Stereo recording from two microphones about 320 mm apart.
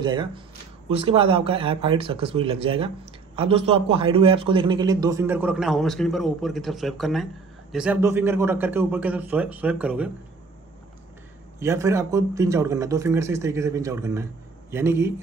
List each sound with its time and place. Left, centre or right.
0.0 s a man's voice: centre
11.6 s a man's voice: centre